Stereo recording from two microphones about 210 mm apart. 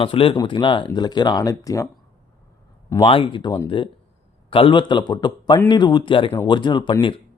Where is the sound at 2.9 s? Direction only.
20° left (ahead or behind).